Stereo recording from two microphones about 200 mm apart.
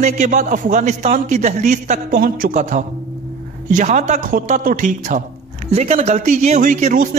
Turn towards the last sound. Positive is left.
turn(degrees=-35)  # may be behind; listen again after turning